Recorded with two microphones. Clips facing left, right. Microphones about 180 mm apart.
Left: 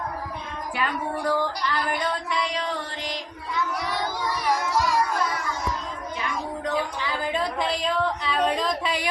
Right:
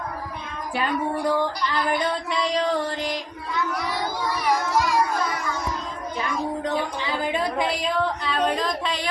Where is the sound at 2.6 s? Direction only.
40° right (ahead or behind).